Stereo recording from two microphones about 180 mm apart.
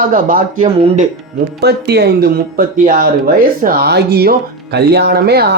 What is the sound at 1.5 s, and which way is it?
Speech, 65° right (ahead or behind).